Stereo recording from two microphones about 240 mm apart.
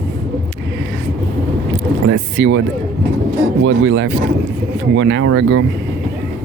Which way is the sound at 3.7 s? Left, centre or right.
Right.